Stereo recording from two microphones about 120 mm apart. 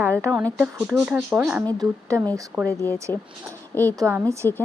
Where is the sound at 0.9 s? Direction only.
5° right (ahead or behind).